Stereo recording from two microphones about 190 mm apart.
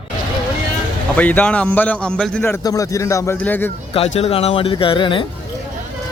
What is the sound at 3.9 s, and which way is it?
Speech, 30° left (ahead or behind).